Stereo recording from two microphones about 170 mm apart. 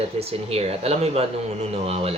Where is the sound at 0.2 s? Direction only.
35° right (ahead or behind).